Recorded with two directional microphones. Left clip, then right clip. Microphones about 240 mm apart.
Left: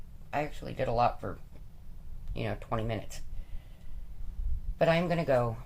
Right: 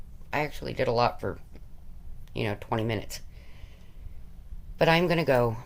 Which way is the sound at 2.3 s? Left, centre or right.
Right.